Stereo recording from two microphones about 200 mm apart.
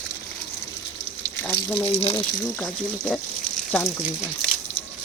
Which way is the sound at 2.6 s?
5° left (ahead or behind).